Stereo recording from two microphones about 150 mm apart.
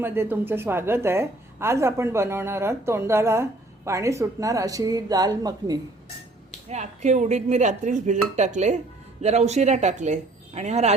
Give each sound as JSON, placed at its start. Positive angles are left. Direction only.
{"t": 0.0, "sound": "a woman's voice", "side_deg": -15}
{"t": 6.7, "sound": "speech", "side_deg": -50}